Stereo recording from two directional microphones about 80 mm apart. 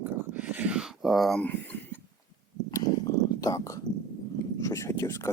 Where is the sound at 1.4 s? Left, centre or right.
Left.